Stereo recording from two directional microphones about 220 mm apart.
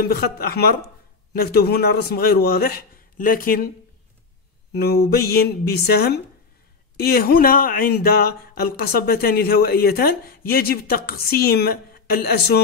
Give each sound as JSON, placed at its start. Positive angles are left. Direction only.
{"t": 0.1, "sound": "speech", "side_deg": 45}
{"t": 4.7, "sound": "speech", "side_deg": 45}